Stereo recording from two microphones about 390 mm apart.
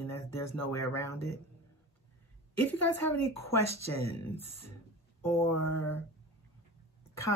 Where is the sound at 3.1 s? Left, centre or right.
Left.